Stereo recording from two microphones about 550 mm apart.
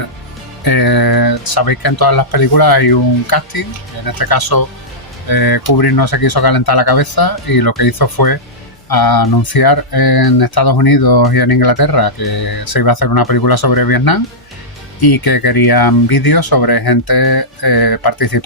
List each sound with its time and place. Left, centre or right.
0.6 s speech: left